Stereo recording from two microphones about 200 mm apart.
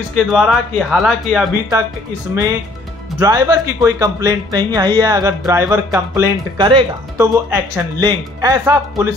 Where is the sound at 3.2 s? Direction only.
15° right (ahead or behind).